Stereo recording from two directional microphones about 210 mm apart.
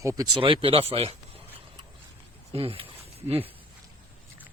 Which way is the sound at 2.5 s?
25° right (ahead or behind).